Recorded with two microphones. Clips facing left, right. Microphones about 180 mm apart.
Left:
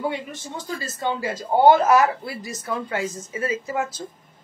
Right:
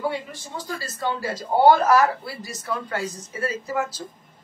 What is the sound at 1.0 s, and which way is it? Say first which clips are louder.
A woman's voice: left 1 dB; 20° left (ahead or behind).